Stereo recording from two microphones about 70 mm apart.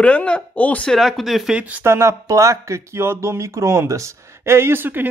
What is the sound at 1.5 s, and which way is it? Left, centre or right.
Speech, centre.